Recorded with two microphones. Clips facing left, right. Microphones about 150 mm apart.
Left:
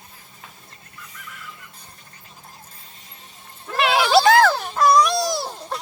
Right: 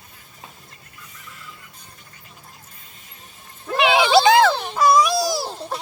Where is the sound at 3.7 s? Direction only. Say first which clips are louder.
Right 1 dB; centre (ahead or behind).